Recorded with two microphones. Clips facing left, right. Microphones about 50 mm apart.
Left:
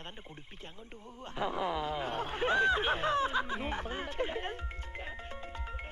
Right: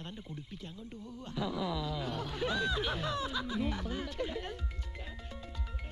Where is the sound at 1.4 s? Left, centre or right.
Left.